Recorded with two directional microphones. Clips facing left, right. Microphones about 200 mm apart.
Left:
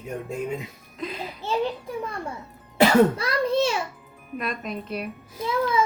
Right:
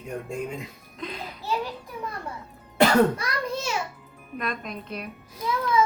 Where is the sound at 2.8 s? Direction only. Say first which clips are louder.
Left 2 dB; 5° left (ahead or behind).